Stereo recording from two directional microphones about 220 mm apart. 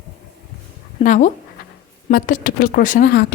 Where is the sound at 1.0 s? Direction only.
35° left (ahead or behind).